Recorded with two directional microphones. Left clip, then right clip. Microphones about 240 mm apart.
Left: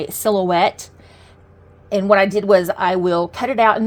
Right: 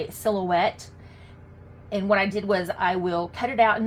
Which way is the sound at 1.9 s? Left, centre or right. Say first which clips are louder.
Left 9 dB; left.